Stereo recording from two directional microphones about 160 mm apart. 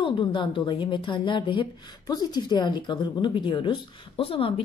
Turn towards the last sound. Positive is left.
turn(degrees=35)  # may be behind; listen again after turning